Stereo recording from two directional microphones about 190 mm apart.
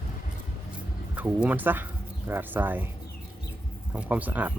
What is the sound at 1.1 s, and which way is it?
Speech, 10° right (ahead or behind).